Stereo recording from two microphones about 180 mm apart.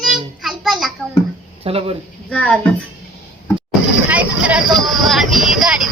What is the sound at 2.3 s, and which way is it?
Speech, 5° left (ahead or behind).